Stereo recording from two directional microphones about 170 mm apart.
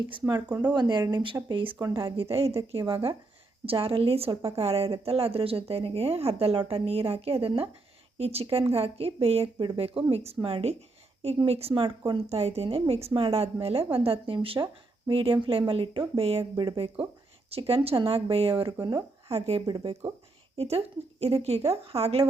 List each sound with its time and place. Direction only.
0.1 s a woman's voice: 25° right (ahead or behind)